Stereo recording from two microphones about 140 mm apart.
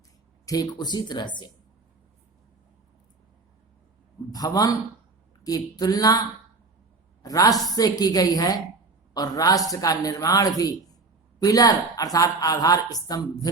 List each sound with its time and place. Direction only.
0.4 s speech: 25° left (ahead or behind)
4.3 s a woman's voice: 25° left (ahead or behind)